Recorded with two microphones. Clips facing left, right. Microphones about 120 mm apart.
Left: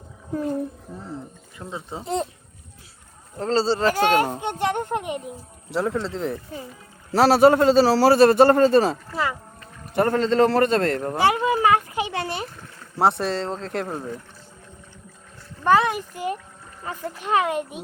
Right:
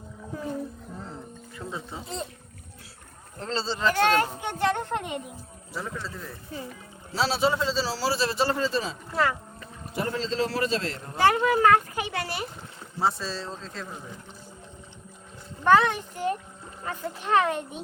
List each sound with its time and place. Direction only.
1.5 s speech: 25° left (ahead or behind)
3.3 s speech: 40° left (ahead or behind)
4.4 s speech: 20° left (ahead or behind)
5.7 s speech: 70° left (ahead or behind)
7.1 s a man's voice: 60° left (ahead or behind)
11.2 s speech: 15° left (ahead or behind)
13.0 s a man's voice: 65° left (ahead or behind)
15.6 s speech: 10° left (ahead or behind)